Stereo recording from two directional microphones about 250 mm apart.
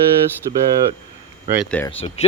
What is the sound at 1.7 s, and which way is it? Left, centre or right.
Speech, centre.